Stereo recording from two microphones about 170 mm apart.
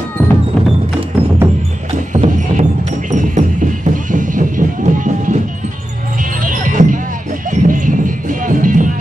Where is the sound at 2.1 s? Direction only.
45° right (ahead or behind).